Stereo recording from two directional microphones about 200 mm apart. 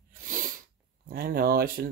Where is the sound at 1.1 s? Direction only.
50° right (ahead or behind).